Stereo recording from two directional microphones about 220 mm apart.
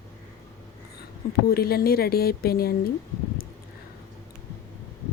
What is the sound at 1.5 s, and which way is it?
A woman's voice, 45° left (ahead or behind).